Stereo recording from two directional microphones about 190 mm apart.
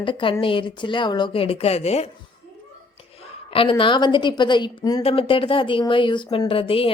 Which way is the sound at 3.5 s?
30° left (ahead or behind).